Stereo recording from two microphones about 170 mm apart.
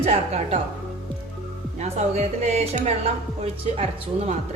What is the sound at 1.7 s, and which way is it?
A woman's voice, 40° right (ahead or behind).